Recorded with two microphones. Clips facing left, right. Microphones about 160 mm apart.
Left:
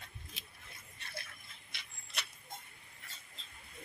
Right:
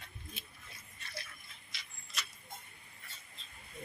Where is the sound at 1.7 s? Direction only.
60° left (ahead or behind).